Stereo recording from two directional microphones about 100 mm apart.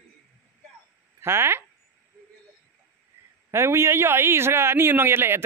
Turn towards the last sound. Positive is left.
turn(degrees=-25)  # may be behind; listen again after turning